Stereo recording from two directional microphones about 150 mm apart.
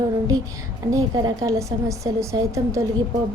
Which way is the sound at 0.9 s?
25° right (ahead or behind).